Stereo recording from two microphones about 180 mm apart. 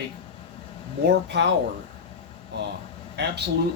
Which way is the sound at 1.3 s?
75° right (ahead or behind).